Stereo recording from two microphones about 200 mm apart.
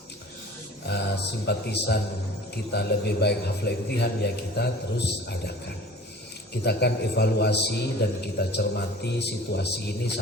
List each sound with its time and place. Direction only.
0.9 s a man's voice: 55° left (ahead or behind)
6.5 s a man's voice: 55° left (ahead or behind)